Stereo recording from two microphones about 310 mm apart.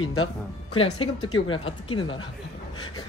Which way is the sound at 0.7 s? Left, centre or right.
Centre.